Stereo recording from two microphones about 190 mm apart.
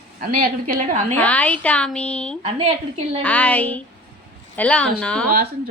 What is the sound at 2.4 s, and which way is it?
Speech, 30° right (ahead or behind).